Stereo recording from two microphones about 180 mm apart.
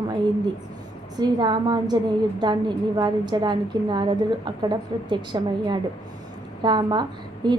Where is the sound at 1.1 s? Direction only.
25° right (ahead or behind).